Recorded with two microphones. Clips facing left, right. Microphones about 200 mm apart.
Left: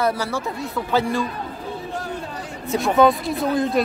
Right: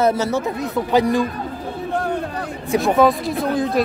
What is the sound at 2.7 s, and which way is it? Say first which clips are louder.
Speech: right 1 dB; centre (ahead or behind).